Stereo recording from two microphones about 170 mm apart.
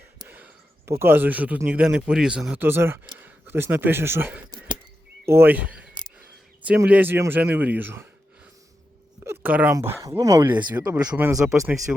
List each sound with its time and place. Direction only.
0.3 s speech: 10° right (ahead or behind)
9.2 s speech: 10° right (ahead or behind)